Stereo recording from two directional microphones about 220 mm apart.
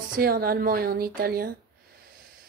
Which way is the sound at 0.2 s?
40° right (ahead or behind).